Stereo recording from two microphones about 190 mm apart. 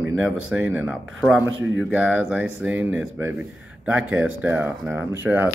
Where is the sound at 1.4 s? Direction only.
90° right.